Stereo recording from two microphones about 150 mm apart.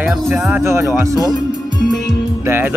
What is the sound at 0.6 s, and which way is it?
Speech, 15° right (ahead or behind).